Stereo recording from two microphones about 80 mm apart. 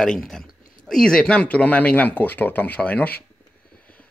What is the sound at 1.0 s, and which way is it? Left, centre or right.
Speech, centre.